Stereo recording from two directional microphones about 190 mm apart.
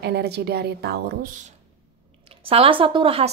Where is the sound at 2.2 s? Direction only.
30° right (ahead or behind).